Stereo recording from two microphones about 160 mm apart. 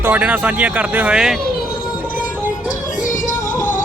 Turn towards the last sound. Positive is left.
turn(degrees=55)  # may be behind; listen again after turning